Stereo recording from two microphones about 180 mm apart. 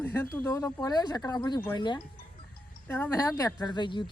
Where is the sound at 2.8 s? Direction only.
10° left (ahead or behind).